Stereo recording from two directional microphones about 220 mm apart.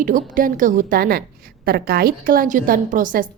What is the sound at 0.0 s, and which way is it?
A woman's voice, 40° right (ahead or behind).